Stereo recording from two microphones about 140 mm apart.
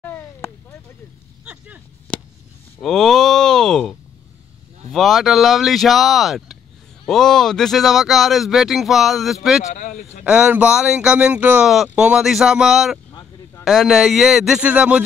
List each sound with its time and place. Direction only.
0.0 s a sound: 15° left (ahead or behind)
1.4 s speech: 10° right (ahead or behind)
2.1 s a sound: 10° left (ahead or behind)
2.8 s speech: centre (ahead or behind)
4.9 s speech: centre (ahead or behind)
9.7 s speech: 60° left (ahead or behind)
10.2 s speech: 5° right (ahead or behind)